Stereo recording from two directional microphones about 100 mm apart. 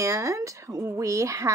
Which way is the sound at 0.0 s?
30° right (ahead or behind).